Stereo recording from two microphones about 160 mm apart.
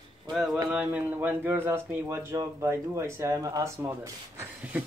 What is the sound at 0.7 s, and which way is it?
Speech, 10° right (ahead or behind).